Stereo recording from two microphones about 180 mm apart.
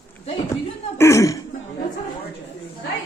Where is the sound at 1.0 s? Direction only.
15° left (ahead or behind).